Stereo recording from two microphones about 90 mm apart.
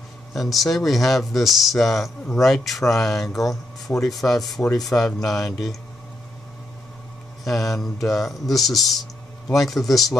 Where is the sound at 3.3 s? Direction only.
40° left (ahead or behind).